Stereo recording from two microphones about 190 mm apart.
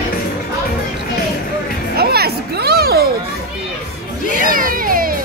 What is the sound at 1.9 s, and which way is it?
Children playing, 55° right (ahead or behind).